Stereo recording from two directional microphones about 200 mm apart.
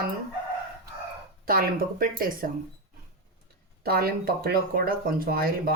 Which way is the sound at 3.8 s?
50° right (ahead or behind).